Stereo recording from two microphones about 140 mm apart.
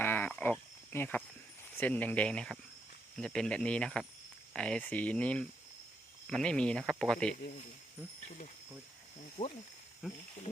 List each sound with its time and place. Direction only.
0.0 s a sound: 15° left (ahead or behind)
0.9 s speech: 15° left (ahead or behind)
9.4 s speech: 40° left (ahead or behind)